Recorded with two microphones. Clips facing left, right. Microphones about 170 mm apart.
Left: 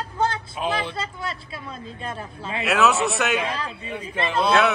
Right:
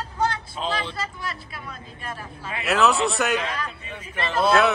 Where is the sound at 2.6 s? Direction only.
Centre (ahead or behind).